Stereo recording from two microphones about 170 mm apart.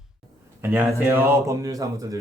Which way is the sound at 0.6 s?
10° right (ahead or behind).